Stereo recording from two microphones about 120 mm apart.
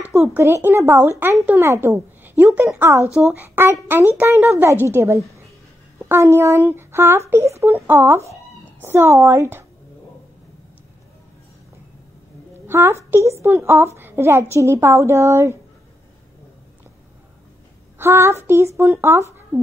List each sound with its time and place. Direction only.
0.1 s a woman's voice: 20° right (ahead or behind)
12.5 s a woman's voice: 20° right (ahead or behind)
17.9 s a woman's voice: 20° right (ahead or behind)